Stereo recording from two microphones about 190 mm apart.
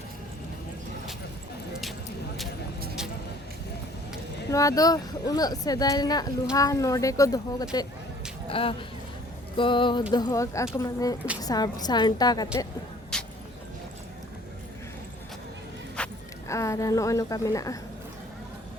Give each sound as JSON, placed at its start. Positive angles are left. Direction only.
{"t": 4.4, "sound": "speech", "side_deg": 20}
{"t": 8.4, "sound": "a woman's voice", "side_deg": 30}
{"t": 13.1, "sound": "vehicle", "side_deg": 5}
{"t": 16.0, "sound": "music", "side_deg": 5}
{"t": 16.5, "sound": "a woman's voice", "side_deg": 15}